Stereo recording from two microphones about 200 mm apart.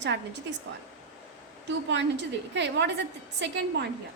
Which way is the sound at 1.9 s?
60° right (ahead or behind).